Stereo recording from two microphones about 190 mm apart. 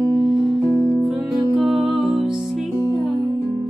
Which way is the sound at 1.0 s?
Centre (ahead or behind).